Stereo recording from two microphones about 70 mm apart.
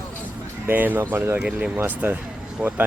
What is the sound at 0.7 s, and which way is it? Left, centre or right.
Speech, right.